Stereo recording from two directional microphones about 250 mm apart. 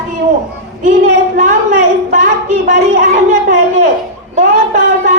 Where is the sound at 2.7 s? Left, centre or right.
Right.